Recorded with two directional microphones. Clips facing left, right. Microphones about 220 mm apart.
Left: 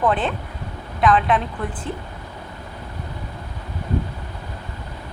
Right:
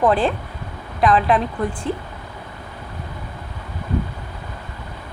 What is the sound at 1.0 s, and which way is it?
Speech, centre (ahead or behind).